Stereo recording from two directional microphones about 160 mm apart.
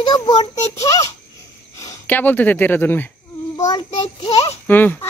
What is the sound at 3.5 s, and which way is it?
Speech, 25° left (ahead or behind).